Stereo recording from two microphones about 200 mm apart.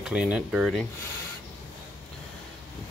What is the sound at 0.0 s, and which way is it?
Speech, 5° right (ahead or behind).